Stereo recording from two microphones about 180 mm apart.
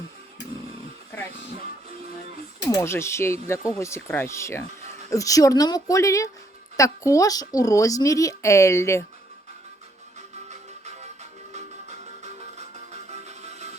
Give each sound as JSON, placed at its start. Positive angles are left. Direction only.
{"t": 2.6, "sound": "speech", "side_deg": 20}
{"t": 10.2, "sound": "music", "side_deg": -40}